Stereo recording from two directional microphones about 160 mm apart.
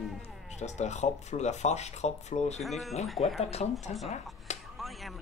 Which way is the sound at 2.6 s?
Centre (ahead or behind).